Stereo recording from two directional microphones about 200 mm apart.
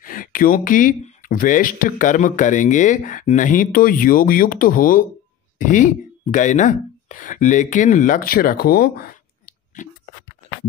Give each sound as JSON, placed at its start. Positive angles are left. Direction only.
{"t": 0.0, "sound": "speech", "side_deg": 45}